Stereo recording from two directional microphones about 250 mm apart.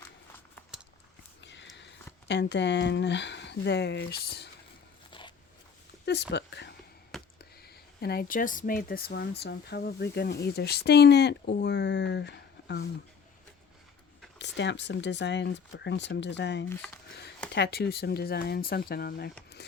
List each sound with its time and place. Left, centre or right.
2.2 s speech: left
6.1 s speech: left
7.1 s a sound: centre
8.0 s speech: left
14.3 s speech: left
16.6 s speech: centre
17.5 s speech: left